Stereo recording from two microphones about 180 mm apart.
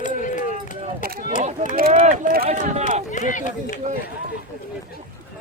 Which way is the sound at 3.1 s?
45° left (ahead or behind).